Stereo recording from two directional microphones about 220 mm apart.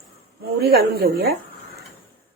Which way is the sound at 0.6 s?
45° right (ahead or behind).